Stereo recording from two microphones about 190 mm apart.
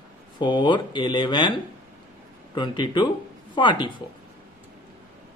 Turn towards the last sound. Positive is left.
turn(degrees=25)  # may be behind; listen again after turning